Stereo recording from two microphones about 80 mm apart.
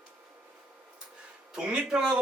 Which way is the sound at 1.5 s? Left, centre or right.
Centre.